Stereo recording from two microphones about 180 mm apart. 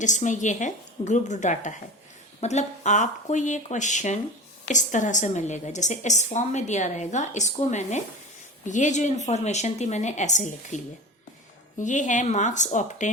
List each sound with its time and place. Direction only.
0.0 s a woman's voice: 45° left (ahead or behind)
11.8 s a woman's voice: 45° left (ahead or behind)